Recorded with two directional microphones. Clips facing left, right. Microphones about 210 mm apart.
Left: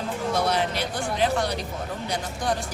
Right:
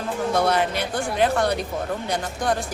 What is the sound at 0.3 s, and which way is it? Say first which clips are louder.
Speech: right 4 dB; 55° right (ahead or behind).